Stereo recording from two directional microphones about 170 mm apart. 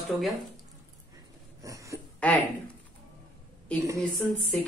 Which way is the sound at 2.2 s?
10° left (ahead or behind).